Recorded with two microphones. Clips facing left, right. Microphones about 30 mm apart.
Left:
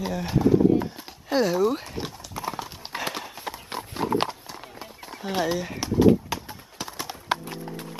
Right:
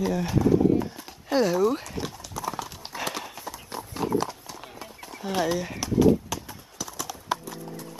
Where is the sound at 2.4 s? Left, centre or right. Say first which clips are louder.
Even; left.